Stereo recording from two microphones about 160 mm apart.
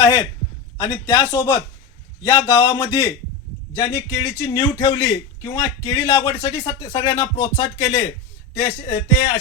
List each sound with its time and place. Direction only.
0.0 s a man's voice: 20° left (ahead or behind)